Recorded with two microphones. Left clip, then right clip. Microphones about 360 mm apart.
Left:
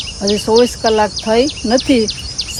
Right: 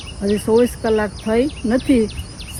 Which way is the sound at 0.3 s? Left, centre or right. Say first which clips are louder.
Left 4 dB; centre.